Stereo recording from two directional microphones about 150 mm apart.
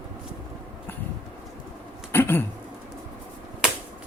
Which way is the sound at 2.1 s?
15° left (ahead or behind).